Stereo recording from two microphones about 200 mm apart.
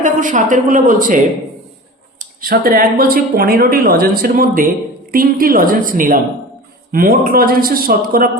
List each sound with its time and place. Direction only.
0.0 s a woman's voice: 40° right (ahead or behind)